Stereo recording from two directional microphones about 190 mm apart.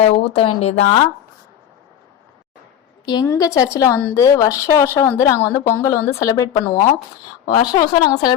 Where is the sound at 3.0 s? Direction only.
20° left (ahead or behind).